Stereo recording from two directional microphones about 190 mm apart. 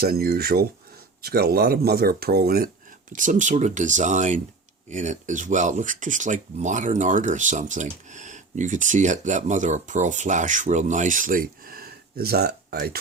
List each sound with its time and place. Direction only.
0.0 s speech: 55° right (ahead or behind)
3.1 s speech: 40° right (ahead or behind)